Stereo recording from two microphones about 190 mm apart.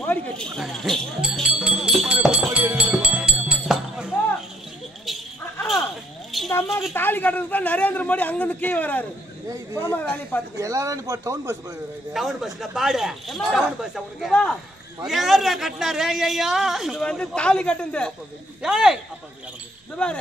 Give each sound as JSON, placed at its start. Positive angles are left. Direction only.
{"t": 0.0, "sound": "speech", "side_deg": 5}
{"t": 2.2, "sound": "music", "side_deg": -5}
{"t": 5.0, "sound": "a sound", "side_deg": 0}
{"t": 6.9, "sound": "a man's voice", "side_deg": 10}
{"t": 10.6, "sound": "speech", "side_deg": -15}
{"t": 12.1, "sound": "a man's voice", "side_deg": 0}